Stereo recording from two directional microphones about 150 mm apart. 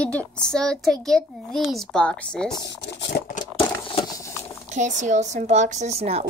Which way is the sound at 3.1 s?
90° left.